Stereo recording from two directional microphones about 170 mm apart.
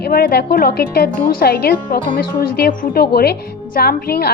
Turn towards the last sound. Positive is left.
turn(degrees=65)  # may be behind; listen again after turning